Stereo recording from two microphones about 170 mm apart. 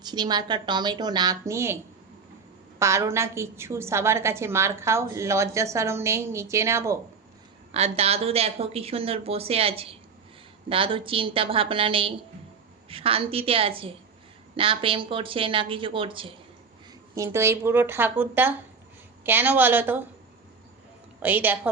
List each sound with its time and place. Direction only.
0.0 s a woman's voice: 25° right (ahead or behind)
7.7 s a woman's voice: 35° right (ahead or behind)
17.2 s a woman's voice: 15° right (ahead or behind)
21.2 s a woman's voice: 10° right (ahead or behind)